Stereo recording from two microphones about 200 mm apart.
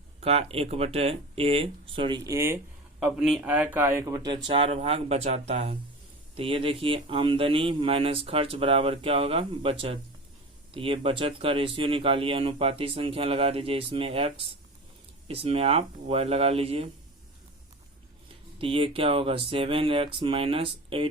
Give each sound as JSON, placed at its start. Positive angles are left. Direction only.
{"t": 0.2, "sound": "speech", "side_deg": -30}
{"t": 3.0, "sound": "speech", "side_deg": 0}
{"t": 18.6, "sound": "speech", "side_deg": -25}